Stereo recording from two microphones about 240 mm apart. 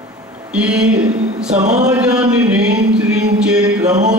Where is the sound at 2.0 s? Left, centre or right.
Centre.